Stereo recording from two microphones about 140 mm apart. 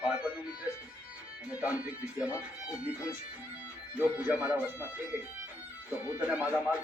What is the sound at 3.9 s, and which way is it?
Music, 15° right (ahead or behind).